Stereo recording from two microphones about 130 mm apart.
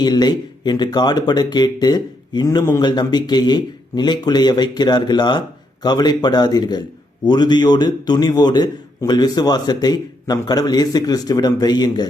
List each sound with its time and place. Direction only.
0.0 s speech: 30° left (ahead or behind)